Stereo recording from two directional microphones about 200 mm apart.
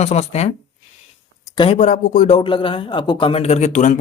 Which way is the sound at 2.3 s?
25° left (ahead or behind).